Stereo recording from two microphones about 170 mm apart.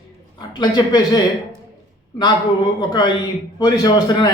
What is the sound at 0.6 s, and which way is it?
Speech, 25° left (ahead or behind).